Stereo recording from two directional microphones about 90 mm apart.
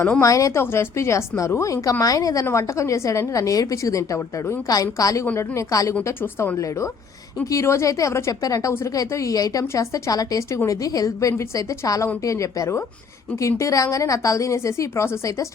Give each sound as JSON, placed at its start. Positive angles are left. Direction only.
{"t": 0.2, "sound": "a woman's voice", "side_deg": 35}
{"t": 5.2, "sound": "a woman's voice", "side_deg": 25}
{"t": 5.5, "sound": "a woman's voice", "side_deg": 35}